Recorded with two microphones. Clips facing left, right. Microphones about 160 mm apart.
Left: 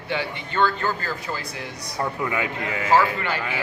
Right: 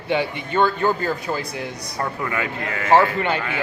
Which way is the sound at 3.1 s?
20° right (ahead or behind).